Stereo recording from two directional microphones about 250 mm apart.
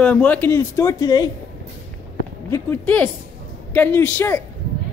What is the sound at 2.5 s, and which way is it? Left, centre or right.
Speech, centre.